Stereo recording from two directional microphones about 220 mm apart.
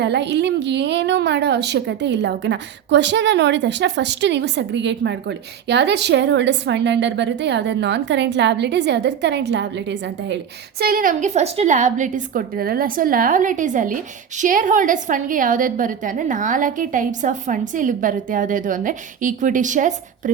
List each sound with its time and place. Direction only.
0.0 s a woman's voice: 50° right (ahead or behind); by 20.3 s 35° right (ahead or behind)